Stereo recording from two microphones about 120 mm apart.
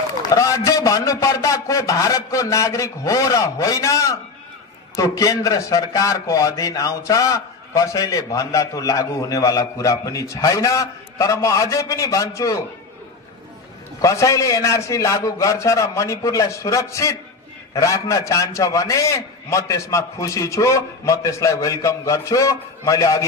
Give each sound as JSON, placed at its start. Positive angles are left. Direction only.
{"t": 0.2, "sound": "a man's voice", "side_deg": 30}
{"t": 14.0, "sound": "a man's voice", "side_deg": 25}